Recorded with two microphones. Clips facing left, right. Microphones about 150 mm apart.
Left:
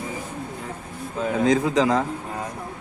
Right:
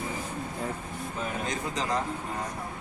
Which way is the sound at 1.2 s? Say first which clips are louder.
Left 13 dB; 90° left.